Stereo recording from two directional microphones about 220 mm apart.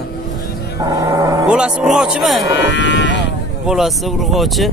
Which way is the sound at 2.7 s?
55° left (ahead or behind).